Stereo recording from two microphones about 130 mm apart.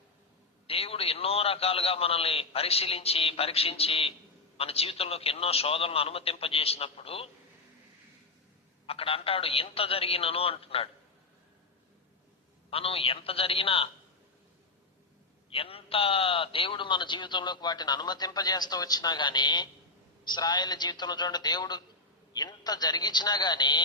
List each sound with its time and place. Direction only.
0.7 s a man's voice: 50° left (ahead or behind)
8.9 s a man's voice: 45° left (ahead or behind)
12.7 s a man's voice: 45° left (ahead or behind)
15.4 s a man's voice: 45° left (ahead or behind)